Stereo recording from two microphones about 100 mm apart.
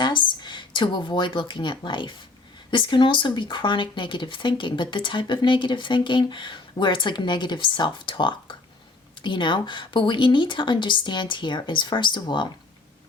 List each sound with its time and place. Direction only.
0.0 s speech: 50° left (ahead or behind)